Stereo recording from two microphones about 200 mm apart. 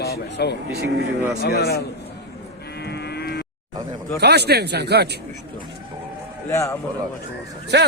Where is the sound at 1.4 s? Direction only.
55° left (ahead or behind).